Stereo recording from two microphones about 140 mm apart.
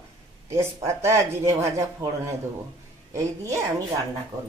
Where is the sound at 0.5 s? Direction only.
20° right (ahead or behind).